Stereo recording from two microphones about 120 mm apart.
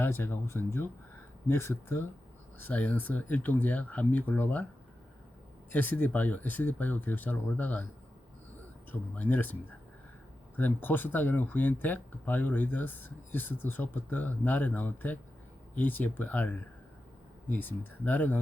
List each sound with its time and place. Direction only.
0.0 s speech: 20° left (ahead or behind)
5.7 s speech: 15° left (ahead or behind)
8.9 s speech: 15° left (ahead or behind)
10.6 s speech: 15° left (ahead or behind)